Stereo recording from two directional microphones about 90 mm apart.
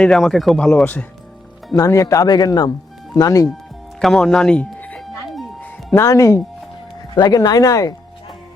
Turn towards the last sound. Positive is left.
turn(degrees=40)  # may be behind; listen again after turning